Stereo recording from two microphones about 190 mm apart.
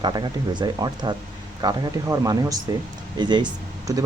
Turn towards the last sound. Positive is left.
turn(degrees=-20)  # may be behind; listen again after turning